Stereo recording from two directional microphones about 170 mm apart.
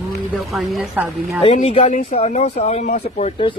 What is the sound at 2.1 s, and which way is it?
Speech, 35° left (ahead or behind).